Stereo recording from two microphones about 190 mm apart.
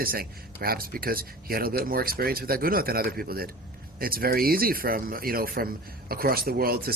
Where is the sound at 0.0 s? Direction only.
50° right (ahead or behind).